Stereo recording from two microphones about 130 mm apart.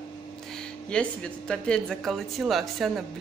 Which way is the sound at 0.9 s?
5° left (ahead or behind).